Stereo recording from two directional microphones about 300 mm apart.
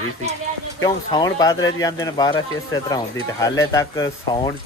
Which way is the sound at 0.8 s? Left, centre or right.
Centre.